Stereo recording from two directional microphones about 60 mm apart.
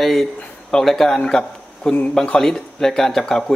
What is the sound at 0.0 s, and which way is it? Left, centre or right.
Speech, centre.